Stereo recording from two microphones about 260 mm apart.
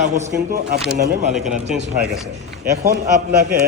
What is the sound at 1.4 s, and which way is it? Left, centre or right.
Speech, centre.